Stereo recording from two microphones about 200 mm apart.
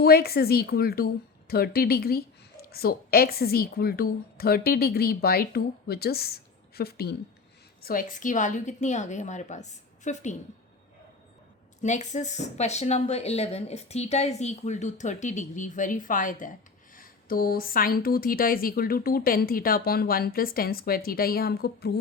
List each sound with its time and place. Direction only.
0.0 s a woman's voice: 50° left (ahead or behind)
11.8 s a woman's voice: 35° left (ahead or behind); by 21.9 s 55° left (ahead or behind)